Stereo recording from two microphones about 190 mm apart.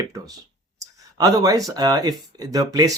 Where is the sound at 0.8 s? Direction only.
20° right (ahead or behind).